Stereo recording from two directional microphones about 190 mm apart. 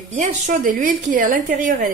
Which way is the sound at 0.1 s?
40° right (ahead or behind).